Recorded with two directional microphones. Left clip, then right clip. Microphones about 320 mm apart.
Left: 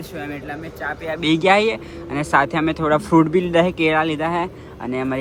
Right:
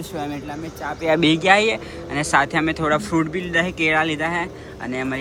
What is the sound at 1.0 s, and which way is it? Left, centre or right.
Speech, right.